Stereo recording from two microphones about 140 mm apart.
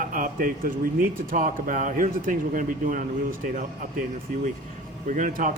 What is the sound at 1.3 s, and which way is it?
A man's voice, 70° right (ahead or behind).